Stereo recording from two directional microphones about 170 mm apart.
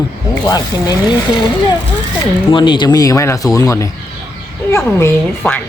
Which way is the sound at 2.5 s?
25° left (ahead or behind).